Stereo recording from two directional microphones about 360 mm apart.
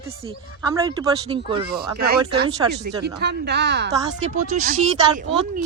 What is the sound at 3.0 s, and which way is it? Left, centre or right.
Speech, right.